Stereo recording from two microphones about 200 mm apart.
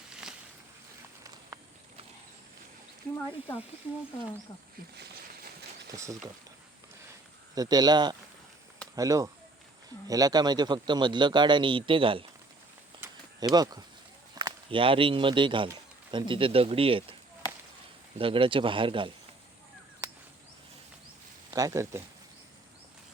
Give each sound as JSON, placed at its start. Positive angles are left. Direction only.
{"t": 5.9, "sound": "speech", "side_deg": -15}
{"t": 7.5, "sound": "speech", "side_deg": -20}
{"t": 13.0, "sound": "a sound", "side_deg": -20}
{"t": 14.3, "sound": "speech", "side_deg": -25}
{"t": 18.2, "sound": "speech", "side_deg": -25}
{"t": 21.5, "sound": "speech", "side_deg": -15}